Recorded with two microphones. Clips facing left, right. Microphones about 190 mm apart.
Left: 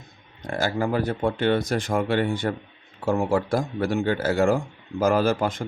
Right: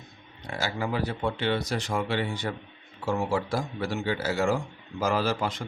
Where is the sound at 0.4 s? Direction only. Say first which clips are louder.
Left 6 dB; 50° left (ahead or behind).